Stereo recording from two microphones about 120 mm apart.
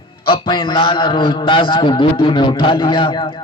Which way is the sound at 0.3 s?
45° left (ahead or behind).